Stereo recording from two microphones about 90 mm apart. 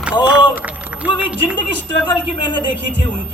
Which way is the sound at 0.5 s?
15° right (ahead or behind).